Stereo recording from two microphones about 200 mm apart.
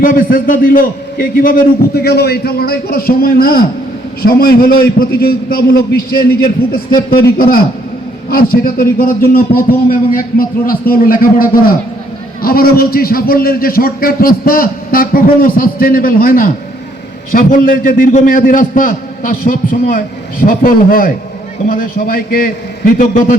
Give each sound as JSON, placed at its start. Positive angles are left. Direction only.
{"t": 0.0, "sound": "a man's voice", "side_deg": 45}